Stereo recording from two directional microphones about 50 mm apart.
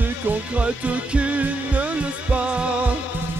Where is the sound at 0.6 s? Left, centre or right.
Right.